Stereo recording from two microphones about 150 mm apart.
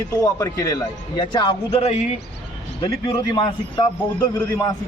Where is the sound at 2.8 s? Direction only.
30° left (ahead or behind).